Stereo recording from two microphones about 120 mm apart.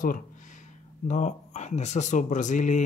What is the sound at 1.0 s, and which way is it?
Speech, 85° left.